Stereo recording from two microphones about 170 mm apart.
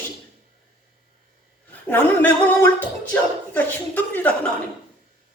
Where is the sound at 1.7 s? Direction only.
10° left (ahead or behind).